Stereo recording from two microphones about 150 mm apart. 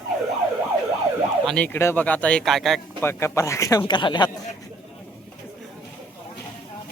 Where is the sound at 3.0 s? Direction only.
15° left (ahead or behind).